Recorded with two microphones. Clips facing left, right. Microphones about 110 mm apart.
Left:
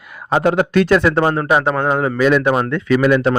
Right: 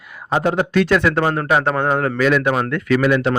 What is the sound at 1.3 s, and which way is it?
Speech, 15° left (ahead or behind).